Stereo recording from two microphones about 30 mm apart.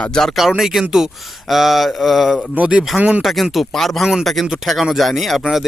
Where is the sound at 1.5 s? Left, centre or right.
Centre.